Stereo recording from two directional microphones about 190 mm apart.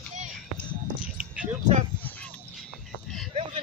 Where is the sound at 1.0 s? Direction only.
5° right (ahead or behind).